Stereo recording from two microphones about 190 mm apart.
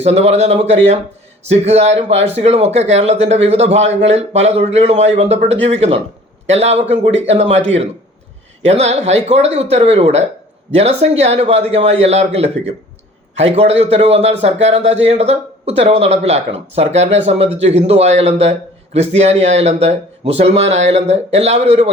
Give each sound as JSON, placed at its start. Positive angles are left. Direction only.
{"t": 0.0, "sound": "speech", "side_deg": -35}
{"t": 8.7, "sound": "speech", "side_deg": -35}